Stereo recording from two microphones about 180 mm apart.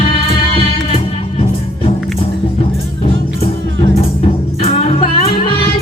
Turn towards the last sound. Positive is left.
turn(degrees=35)  # may be behind; listen again after turning